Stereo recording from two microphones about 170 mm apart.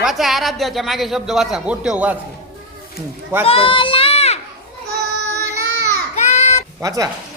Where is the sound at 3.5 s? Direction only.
30° left (ahead or behind).